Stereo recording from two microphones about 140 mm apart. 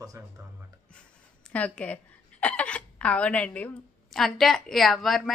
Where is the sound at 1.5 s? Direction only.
10° left (ahead or behind).